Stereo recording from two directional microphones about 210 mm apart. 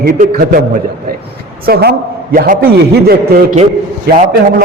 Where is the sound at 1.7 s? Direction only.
50° right (ahead or behind).